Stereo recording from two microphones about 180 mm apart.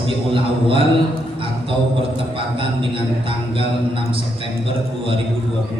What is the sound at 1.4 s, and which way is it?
A man's voice, 30° right (ahead or behind).